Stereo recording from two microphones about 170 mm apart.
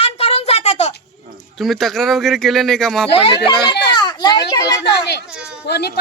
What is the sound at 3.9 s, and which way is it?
Children playing, 25° left (ahead or behind).